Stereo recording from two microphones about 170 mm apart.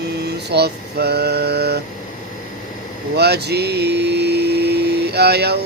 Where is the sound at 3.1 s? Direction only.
75° right (ahead or behind).